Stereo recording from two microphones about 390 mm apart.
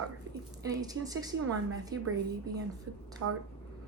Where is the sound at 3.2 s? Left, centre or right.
Right.